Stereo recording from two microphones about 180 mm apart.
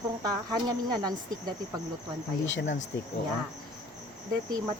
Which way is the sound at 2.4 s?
90° left.